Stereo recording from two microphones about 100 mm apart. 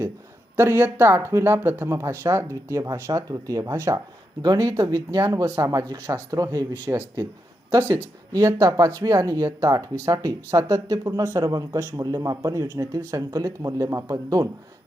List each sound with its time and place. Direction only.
0.5 s speech: 20° right (ahead or behind)
6.8 s speech: 20° right (ahead or behind)
8.3 s speech: 40° right (ahead or behind)